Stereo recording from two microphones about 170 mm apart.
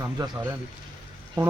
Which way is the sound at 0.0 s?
20° right (ahead or behind).